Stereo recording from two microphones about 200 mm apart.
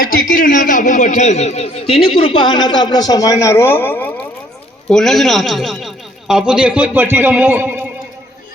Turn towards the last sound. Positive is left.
turn(degrees=-10)  # may be behind; listen again after turning